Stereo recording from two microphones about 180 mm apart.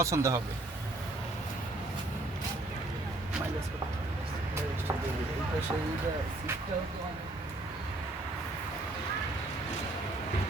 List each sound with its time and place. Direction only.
0.0 s speech: 15° right (ahead or behind)